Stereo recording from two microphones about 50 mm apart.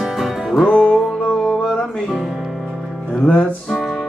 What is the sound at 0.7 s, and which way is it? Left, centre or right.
Music, left.